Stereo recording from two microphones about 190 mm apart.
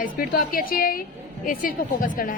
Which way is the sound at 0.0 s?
50° left (ahead or behind).